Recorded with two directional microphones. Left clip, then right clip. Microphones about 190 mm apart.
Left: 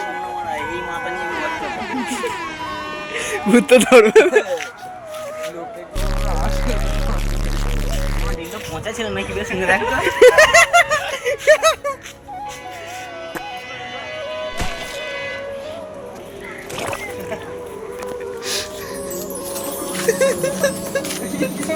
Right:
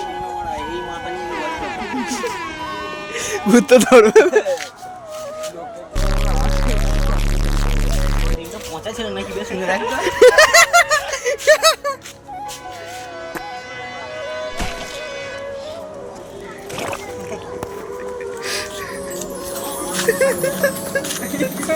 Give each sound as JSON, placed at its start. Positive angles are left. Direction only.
{"t": 0.2, "sound": "a sound", "side_deg": 0}
{"t": 1.0, "sound": "music", "side_deg": 0}
{"t": 3.2, "sound": "speech", "side_deg": 0}
{"t": 6.0, "sound": "music", "side_deg": 0}
{"t": 9.0, "sound": "speech", "side_deg": -15}
{"t": 9.6, "sound": "speech", "side_deg": 0}
{"t": 11.4, "sound": "a sound", "side_deg": 0}
{"t": 16.7, "sound": "music", "side_deg": 0}
{"t": 19.5, "sound": "music", "side_deg": -25}
{"t": 20.1, "sound": "speech", "side_deg": 0}